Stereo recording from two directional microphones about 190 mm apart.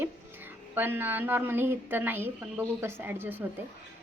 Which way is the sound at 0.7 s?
10° right (ahead or behind).